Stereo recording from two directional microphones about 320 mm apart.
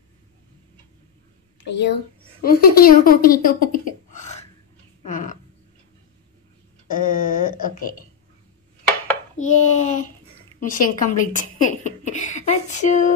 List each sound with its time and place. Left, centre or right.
1.7 s speech: left
5.0 s a sound: left
6.9 s speech: left
9.4 s speech: left